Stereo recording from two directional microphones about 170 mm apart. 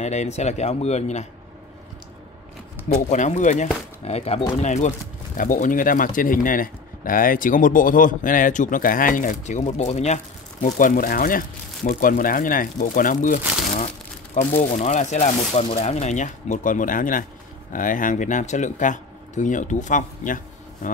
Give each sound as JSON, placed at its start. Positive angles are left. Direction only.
{"t": 0.0, "sound": "speech", "side_deg": 40}
{"t": 3.1, "sound": "speech", "side_deg": 45}